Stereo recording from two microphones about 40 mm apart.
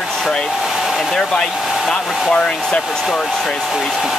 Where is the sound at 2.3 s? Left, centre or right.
Left.